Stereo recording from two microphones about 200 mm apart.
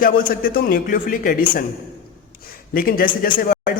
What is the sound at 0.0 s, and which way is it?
Speech, 45° left (ahead or behind).